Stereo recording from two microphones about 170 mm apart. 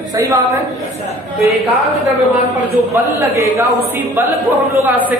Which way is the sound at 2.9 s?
15° right (ahead or behind).